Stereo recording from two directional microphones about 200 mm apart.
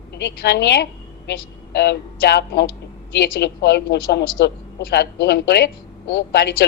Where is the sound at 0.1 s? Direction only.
55° left (ahead or behind).